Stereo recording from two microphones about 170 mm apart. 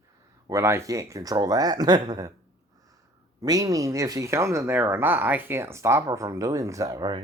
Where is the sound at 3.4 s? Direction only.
20° right (ahead or behind).